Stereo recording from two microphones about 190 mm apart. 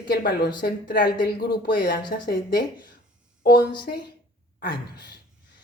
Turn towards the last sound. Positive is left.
turn(degrees=60)  # may be behind; listen again after turning